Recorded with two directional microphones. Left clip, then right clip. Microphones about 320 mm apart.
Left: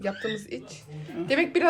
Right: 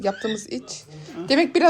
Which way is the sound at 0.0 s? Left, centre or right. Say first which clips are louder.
Right 5 dB; centre.